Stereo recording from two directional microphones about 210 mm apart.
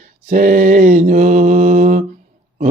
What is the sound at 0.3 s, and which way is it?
Mantra, 40° right (ahead or behind).